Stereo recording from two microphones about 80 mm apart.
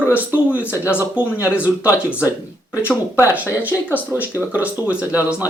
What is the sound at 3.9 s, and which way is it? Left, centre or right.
Speech, right.